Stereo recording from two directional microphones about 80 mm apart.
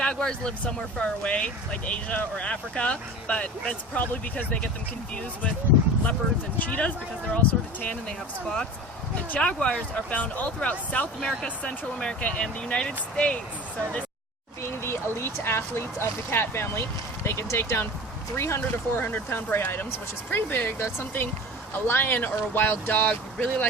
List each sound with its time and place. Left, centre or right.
0.0 s speech: centre
6.6 s speech: centre
14.6 s speech: left